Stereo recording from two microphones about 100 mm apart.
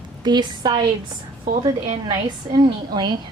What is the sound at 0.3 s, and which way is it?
Speech, 45° right (ahead or behind).